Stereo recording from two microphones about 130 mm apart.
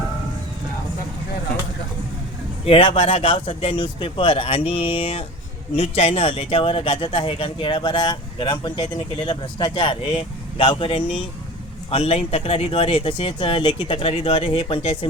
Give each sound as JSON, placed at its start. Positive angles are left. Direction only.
{"t": 2.6, "sound": "speech", "side_deg": 45}